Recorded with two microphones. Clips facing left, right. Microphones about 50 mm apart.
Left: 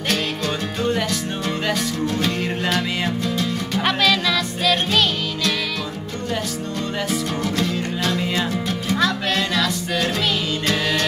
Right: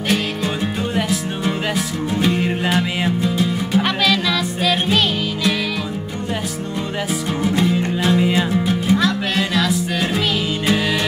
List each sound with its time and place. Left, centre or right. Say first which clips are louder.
0.9 s music: right 2 dB; centre
3.8 s music: right 1 dB; centre
4.8 s music: right 2 dB; centre
7.1 s music: right 2 dB; centre
8.9 s music: even; centre